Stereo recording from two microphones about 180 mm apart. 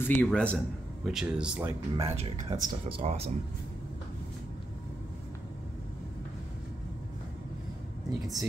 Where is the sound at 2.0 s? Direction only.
35° right (ahead or behind).